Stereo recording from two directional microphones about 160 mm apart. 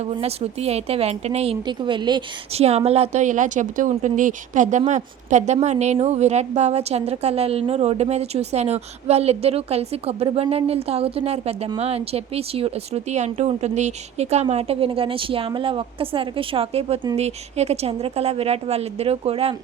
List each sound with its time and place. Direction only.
0.0 s a woman's voice: 40° right (ahead or behind)
1.6 s a woman's voice: 30° right (ahead or behind)
2.5 s a woman's voice: 40° right (ahead or behind)